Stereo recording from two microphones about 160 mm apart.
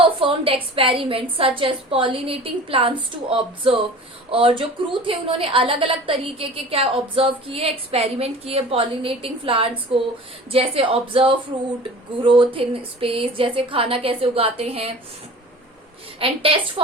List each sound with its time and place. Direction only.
0.0 s a woman's voice: 35° right (ahead or behind)
16.2 s a woman's voice: 35° right (ahead or behind)